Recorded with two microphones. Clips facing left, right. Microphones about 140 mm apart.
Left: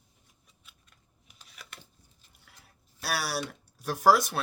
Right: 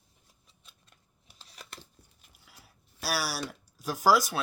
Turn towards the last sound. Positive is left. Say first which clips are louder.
# left 1 dB
turn(degrees=0)  # may be behind; listen again after turning